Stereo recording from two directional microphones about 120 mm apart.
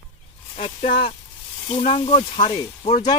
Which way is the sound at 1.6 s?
60° left (ahead or behind).